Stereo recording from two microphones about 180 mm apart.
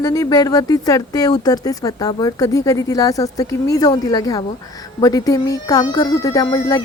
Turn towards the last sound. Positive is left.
turn(degrees=20)  # may be behind; listen again after turning